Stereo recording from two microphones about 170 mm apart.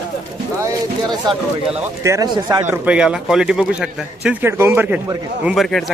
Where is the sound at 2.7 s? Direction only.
5° right (ahead or behind).